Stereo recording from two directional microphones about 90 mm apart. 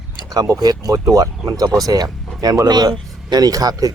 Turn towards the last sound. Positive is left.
turn(degrees=-45)  # may be behind; listen again after turning